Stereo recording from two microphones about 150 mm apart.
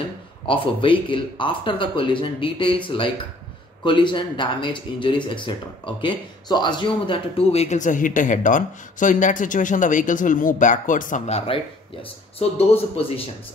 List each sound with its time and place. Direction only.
0.5 s speech: 35° left (ahead or behind)